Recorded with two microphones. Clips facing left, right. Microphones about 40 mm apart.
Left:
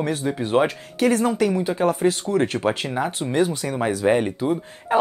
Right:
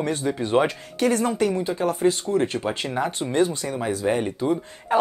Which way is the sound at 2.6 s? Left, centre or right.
Left.